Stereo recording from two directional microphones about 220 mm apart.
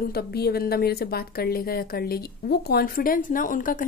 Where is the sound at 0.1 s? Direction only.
45° left (ahead or behind).